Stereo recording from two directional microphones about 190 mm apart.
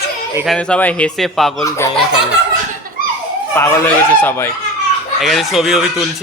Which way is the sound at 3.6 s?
10° left (ahead or behind).